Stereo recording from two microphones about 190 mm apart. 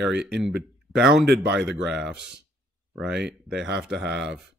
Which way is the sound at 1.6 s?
Centre (ahead or behind).